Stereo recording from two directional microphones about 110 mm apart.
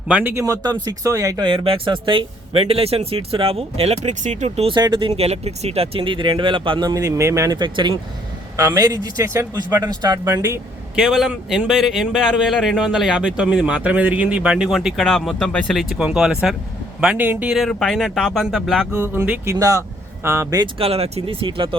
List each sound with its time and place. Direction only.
0.1 s speech: 15° right (ahead or behind)
0.3 s a man's voice: 30° right (ahead or behind)
1.4 s speech: 50° right (ahead or behind); by 4.7 s 70° right (ahead or behind)
4.7 s speech: 45° right (ahead or behind)
5.1 s speech: 70° right (ahead or behind); by 7.6 s 25° right (ahead or behind)
7.6 s speech: 40° right (ahead or behind)
8.5 s a man's voice: 30° right (ahead or behind)
9.8 s a man's voice: 40° right (ahead or behind)
10.3 s speech: 25° right (ahead or behind)
10.9 s speech: 5° right (ahead or behind)
17.5 s speech: centre (ahead or behind)
19.1 s speech: 15° right (ahead or behind)
19.5 s a man's voice: 30° right (ahead or behind)
20.7 s speech: 65° right (ahead or behind)